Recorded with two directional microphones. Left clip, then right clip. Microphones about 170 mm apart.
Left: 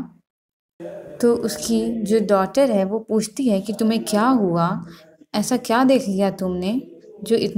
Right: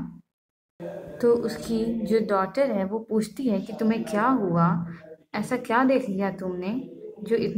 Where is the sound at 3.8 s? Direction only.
45° left (ahead or behind).